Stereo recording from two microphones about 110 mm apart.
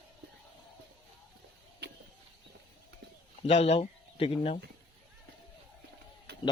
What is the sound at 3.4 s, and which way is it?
Speech, 75° left (ahead or behind).